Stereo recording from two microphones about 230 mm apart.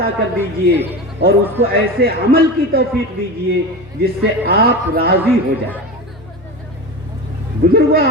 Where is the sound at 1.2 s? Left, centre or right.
Right.